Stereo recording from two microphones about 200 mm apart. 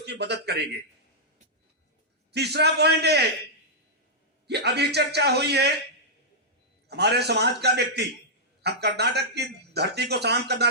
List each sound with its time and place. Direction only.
0.0 s speech: 55° right (ahead or behind)
2.3 s speech: 55° right (ahead or behind)
4.4 s speech: 55° right (ahead or behind)
6.8 s speech: 55° right (ahead or behind)